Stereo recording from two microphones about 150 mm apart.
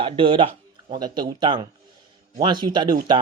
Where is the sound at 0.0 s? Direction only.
35° right (ahead or behind).